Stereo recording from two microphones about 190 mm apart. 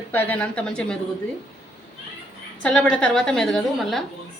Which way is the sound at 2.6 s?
5° left (ahead or behind).